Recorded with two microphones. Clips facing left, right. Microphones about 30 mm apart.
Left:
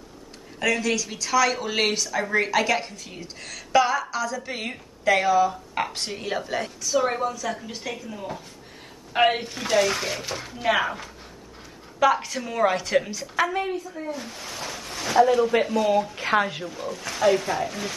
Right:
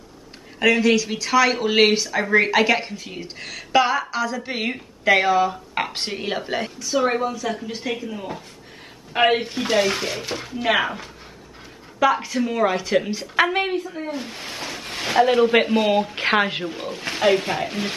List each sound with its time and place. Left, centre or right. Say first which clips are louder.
0.6 s speech: right 6 dB; right
12.0 s speech: right 1 dB; centre
12.4 s speech: right 5 dB; right
12.6 s speech: left 2 dB; centre
13.1 s a woman's voice: right 5 dB; right
13.5 s speech: right 5 dB; right